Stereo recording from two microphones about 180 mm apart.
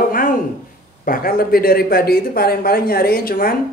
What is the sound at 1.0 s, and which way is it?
Speech, 55° left (ahead or behind).